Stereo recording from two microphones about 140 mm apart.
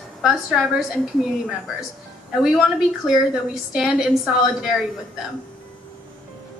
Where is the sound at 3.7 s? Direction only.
Centre (ahead or behind).